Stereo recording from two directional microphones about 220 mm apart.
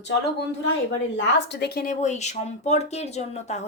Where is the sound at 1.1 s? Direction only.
50° left (ahead or behind).